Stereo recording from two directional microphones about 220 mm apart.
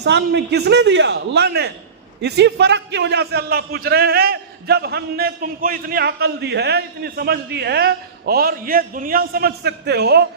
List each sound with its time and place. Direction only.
0.0 s a man's voice: 50° right (ahead or behind)